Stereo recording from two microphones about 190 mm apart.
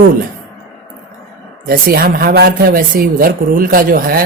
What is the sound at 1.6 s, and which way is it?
Speech, 50° right (ahead or behind).